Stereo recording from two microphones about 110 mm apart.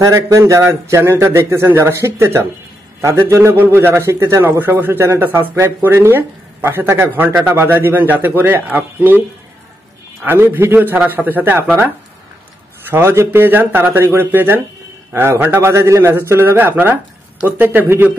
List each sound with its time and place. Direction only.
0.0 s a man's voice: 30° right (ahead or behind)
10.2 s speech: 20° right (ahead or behind)
12.9 s a man's voice: 25° right (ahead or behind)